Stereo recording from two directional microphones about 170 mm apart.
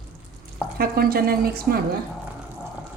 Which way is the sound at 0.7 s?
60° right (ahead or behind).